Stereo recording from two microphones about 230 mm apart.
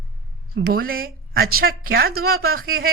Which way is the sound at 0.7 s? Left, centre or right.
Right.